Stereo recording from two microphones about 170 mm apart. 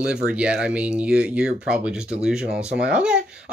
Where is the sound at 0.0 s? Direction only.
5° right (ahead or behind).